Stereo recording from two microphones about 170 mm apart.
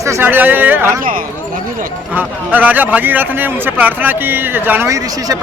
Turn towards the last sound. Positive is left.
turn(degrees=-20)  # may be behind; listen again after turning